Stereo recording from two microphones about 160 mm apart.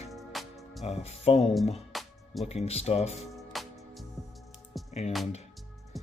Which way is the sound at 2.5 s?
40° left (ahead or behind).